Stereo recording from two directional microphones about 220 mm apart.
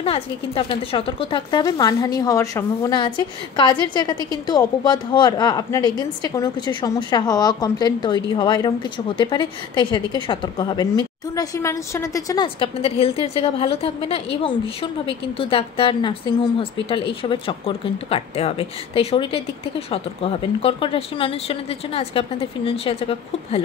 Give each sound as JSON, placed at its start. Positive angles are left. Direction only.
{"t": 0.0, "sound": "speech", "side_deg": 25}